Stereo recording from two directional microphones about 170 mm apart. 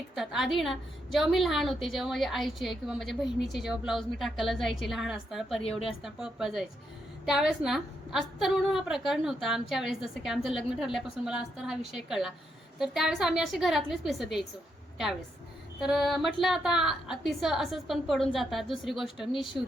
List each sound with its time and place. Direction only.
0.1 s a woman's voice: centre (ahead or behind)
15.8 s a woman's voice: centre (ahead or behind)